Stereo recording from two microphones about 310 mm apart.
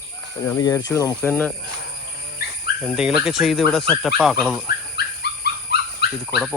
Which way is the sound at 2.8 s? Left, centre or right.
Centre.